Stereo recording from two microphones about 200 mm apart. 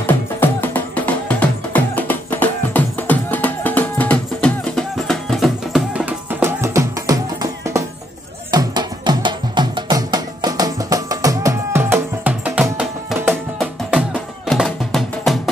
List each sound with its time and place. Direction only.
0.0 s music: 10° left (ahead or behind); by 7.2 s 15° right (ahead or behind)
8.5 s music: 20° right (ahead or behind); by 15.5 s centre (ahead or behind)